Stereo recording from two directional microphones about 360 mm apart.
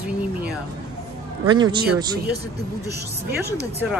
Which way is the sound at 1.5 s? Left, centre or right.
Centre.